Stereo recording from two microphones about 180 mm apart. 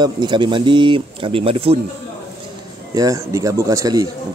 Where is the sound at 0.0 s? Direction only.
25° right (ahead or behind).